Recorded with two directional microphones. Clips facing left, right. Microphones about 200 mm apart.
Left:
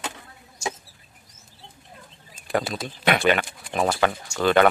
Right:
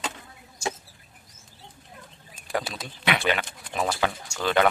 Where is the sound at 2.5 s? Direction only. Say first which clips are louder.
Left 5 dB; 55° left (ahead or behind).